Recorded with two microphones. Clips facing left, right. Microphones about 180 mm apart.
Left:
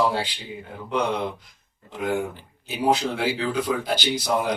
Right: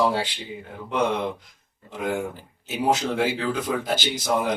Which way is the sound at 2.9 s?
45° right (ahead or behind).